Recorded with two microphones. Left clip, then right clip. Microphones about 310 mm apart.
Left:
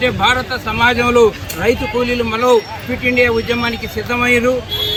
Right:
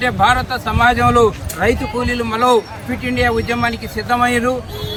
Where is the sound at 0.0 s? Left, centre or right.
Centre.